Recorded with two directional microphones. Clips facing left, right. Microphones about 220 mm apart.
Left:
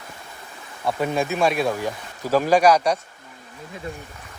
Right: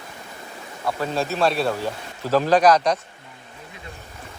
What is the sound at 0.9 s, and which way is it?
Speech, 20° left (ahead or behind).